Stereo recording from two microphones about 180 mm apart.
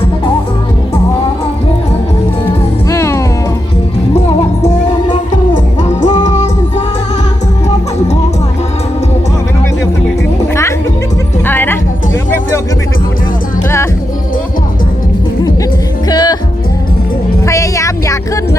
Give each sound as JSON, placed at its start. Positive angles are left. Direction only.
{"t": 2.9, "sound": "music", "side_deg": 15}
{"t": 6.2, "sound": "music", "side_deg": 40}
{"t": 10.5, "sound": "music", "side_deg": 15}
{"t": 16.0, "sound": "music", "side_deg": 25}
{"t": 17.4, "sound": "a sound", "side_deg": 15}